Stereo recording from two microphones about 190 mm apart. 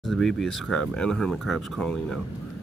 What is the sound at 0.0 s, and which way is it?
Speech, centre (ahead or behind).